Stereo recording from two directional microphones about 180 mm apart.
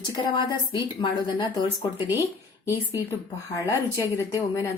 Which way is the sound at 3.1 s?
15° left (ahead or behind).